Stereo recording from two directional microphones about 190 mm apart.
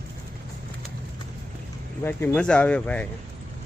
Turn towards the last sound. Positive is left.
turn(degrees=5)  # may be behind; listen again after turning